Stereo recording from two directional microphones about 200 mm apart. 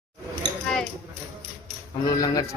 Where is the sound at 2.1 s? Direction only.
20° left (ahead or behind).